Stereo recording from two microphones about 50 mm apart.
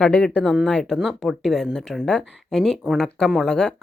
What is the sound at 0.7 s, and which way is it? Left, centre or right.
Speech, centre.